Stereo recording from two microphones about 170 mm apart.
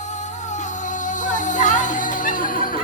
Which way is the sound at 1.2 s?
45° left (ahead or behind).